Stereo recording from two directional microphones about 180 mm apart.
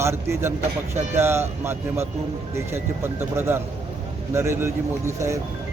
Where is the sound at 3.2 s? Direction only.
15° right (ahead or behind).